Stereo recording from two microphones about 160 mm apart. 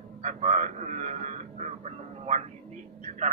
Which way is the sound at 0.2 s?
45° right (ahead or behind).